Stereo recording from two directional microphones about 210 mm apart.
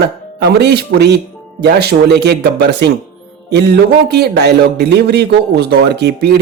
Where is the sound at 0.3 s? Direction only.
55° right (ahead or behind).